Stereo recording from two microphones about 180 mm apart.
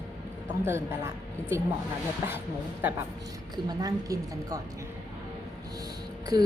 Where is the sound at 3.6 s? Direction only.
20° right (ahead or behind).